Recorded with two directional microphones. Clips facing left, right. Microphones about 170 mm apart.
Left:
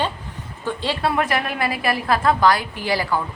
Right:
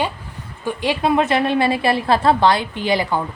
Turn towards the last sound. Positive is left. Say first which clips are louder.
# right 3 dB
turn(degrees=-20)  # may be behind; listen again after turning